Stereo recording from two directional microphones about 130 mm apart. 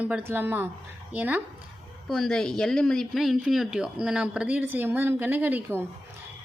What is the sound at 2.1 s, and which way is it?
A woman's voice, 5° left (ahead or behind).